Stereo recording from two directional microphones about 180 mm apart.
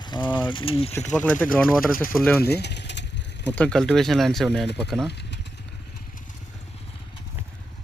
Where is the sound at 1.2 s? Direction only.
10° left (ahead or behind).